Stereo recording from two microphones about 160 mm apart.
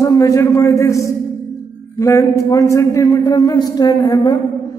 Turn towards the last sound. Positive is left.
turn(degrees=25)  # may be behind; listen again after turning